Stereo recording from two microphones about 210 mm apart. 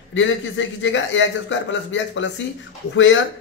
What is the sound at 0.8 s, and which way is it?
A man's voice, 60° left (ahead or behind).